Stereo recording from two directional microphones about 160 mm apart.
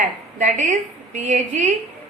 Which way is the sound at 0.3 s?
50° right (ahead or behind).